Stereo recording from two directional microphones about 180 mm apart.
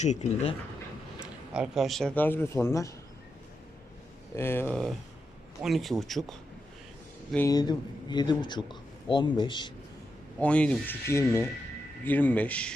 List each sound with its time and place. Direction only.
0.0 s speech: 40° left (ahead or behind)
1.2 s speech: 5° right (ahead or behind); by 2.9 s 15° left (ahead or behind)
4.4 s speech: 15° left (ahead or behind)
7.3 s speech: 20° left (ahead or behind)
10.4 s speech: 5° left (ahead or behind)